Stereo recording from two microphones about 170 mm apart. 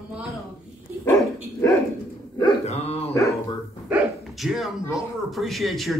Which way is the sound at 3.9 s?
5° right (ahead or behind).